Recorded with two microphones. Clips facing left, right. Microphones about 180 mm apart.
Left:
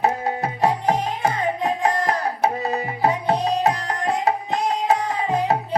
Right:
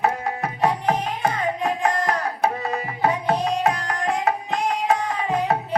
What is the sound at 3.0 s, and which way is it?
Music, 35° left (ahead or behind).